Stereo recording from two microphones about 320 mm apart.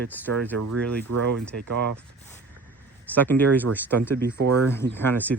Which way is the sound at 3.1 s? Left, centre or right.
Centre.